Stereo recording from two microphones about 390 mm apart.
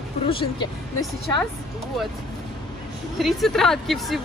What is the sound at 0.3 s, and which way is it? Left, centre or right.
Speech, centre.